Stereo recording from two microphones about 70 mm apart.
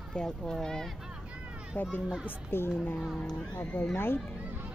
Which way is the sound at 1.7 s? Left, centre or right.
Left.